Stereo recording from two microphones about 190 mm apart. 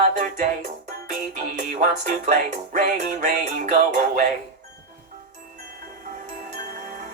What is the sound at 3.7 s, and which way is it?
Music, 45° right (ahead or behind).